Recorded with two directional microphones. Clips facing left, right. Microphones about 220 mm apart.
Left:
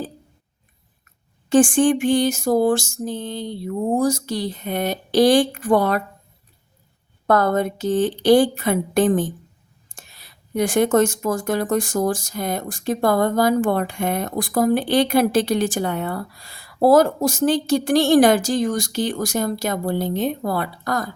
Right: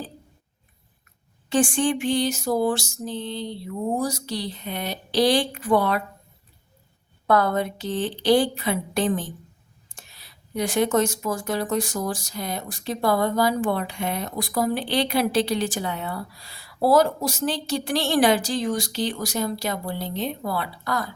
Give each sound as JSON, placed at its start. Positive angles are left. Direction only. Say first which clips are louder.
{"t": 1.5, "sound": "speech", "louder": "left 7 dB", "side_deg": 50}
{"t": 7.3, "sound": "speech", "louder": "left 3 dB", "side_deg": 45}